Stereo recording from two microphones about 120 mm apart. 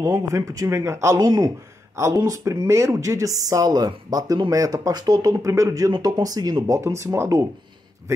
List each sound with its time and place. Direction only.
0.1 s speech: 25° right (ahead or behind)